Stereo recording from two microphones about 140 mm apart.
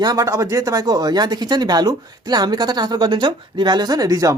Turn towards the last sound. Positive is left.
turn(degrees=-25)  # may be behind; listen again after turning